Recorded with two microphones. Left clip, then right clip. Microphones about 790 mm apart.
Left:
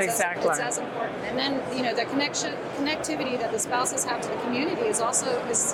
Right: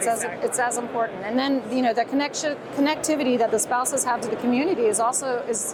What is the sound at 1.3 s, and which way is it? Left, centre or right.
Speech, right.